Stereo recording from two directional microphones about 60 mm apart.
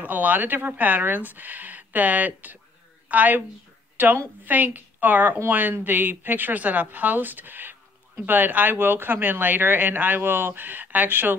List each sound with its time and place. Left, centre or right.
0.0 s a woman's voice: right
3.9 s a sound: right
4.5 s speech: right